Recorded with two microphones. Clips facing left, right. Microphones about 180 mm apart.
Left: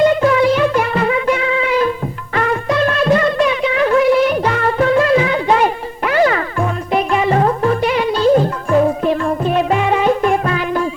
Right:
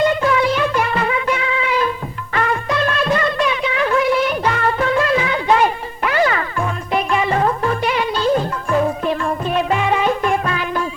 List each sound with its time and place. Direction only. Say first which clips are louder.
0.2 s music: left 4 dB; 45° left (ahead or behind)